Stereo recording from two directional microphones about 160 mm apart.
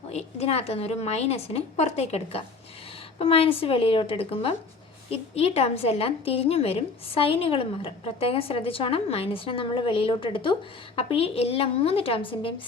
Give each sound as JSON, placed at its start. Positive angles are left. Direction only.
{"t": 0.1, "sound": "a woman's voice", "side_deg": 40}